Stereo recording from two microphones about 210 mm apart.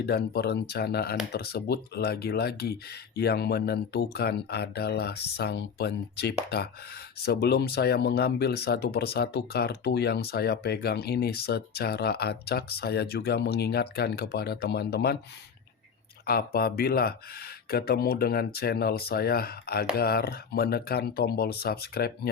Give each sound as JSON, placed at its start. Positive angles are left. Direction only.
{"t": 0.0, "sound": "speech", "side_deg": 50}
{"t": 16.2, "sound": "speech", "side_deg": 45}